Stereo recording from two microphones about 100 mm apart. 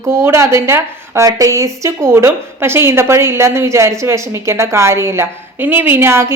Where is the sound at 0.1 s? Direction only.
25° right (ahead or behind).